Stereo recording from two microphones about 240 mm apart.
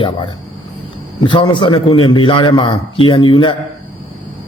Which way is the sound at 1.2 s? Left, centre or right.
Centre.